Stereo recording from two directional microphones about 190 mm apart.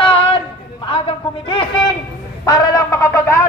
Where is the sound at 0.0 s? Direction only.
30° left (ahead or behind).